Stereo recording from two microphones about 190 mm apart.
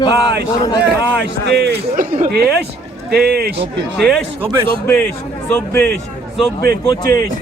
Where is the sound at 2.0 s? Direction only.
45° right (ahead or behind).